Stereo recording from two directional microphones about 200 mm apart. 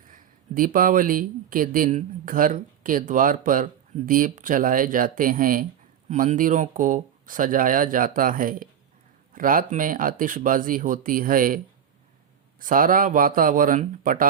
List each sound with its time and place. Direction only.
0.1 s speech: 45° right (ahead or behind)